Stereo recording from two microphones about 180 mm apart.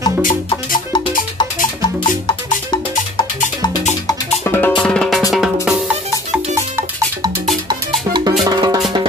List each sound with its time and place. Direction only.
0.2 s music: 50° left (ahead or behind)
4.1 s music: 10° left (ahead or behind)
7.6 s music: 25° right (ahead or behind)